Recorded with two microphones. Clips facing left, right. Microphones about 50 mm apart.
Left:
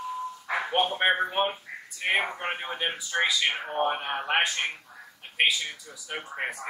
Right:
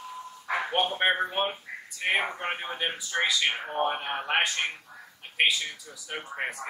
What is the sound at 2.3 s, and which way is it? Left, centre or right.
Speech, centre.